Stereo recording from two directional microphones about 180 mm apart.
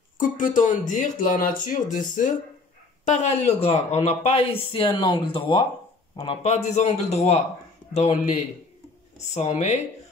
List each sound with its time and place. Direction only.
0.2 s speech: 45° left (ahead or behind)